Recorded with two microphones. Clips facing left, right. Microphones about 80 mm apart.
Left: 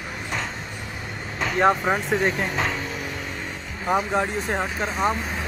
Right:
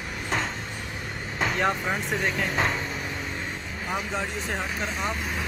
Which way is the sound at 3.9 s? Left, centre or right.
Left.